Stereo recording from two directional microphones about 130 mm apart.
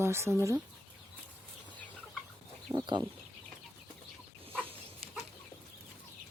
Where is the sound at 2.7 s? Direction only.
25° right (ahead or behind).